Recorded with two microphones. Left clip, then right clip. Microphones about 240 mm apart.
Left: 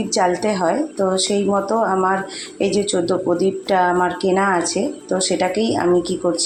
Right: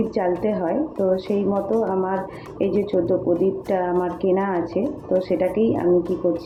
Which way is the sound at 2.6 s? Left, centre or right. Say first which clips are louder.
Left 2 dB; centre.